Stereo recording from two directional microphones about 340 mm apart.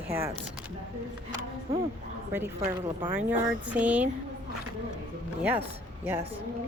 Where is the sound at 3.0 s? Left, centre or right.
Centre.